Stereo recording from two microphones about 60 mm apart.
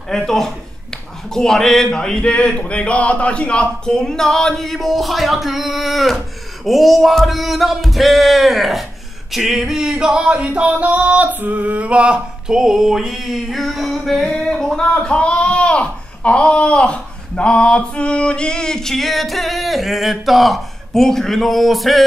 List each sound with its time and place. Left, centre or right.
0.1 s speech: centre
9.3 s music: centre
15.0 s speech: centre